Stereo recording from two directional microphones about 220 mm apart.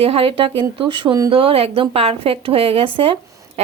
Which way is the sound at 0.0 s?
25° right (ahead or behind).